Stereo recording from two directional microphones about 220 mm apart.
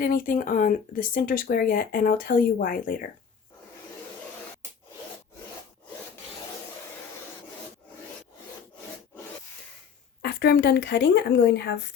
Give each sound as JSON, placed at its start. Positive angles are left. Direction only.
{"t": 0.0, "sound": "speech", "side_deg": 40}
{"t": 10.2, "sound": "speech", "side_deg": 45}